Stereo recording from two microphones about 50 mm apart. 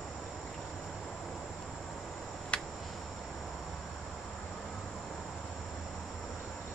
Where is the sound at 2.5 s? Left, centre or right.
Left.